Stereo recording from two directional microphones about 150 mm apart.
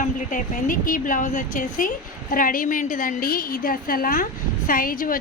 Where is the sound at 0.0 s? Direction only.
60° left (ahead or behind).